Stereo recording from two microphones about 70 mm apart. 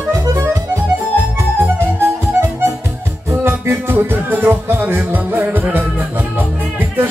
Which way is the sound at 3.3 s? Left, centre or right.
Right.